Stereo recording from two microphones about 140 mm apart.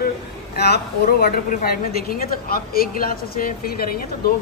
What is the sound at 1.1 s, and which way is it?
A woman's voice, 90° left.